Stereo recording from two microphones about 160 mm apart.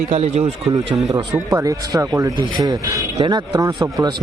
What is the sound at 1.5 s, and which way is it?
Speech, 20° right (ahead or behind).